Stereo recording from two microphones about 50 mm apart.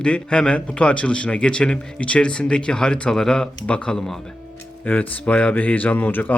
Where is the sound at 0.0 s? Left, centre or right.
Centre.